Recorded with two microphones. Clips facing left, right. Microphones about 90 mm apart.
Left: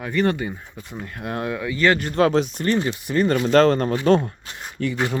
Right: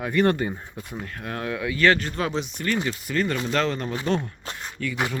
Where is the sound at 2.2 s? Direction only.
55° left (ahead or behind).